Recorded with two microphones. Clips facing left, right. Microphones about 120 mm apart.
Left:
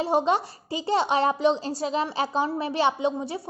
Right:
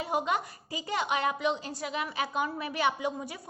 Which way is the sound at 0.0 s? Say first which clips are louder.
Left 7 dB; 30° left (ahead or behind).